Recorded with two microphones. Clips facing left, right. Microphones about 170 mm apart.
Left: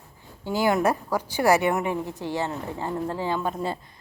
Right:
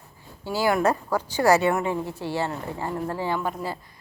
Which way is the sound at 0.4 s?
20° left (ahead or behind).